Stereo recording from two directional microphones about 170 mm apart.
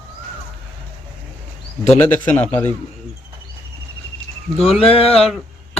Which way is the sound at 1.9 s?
10° left (ahead or behind).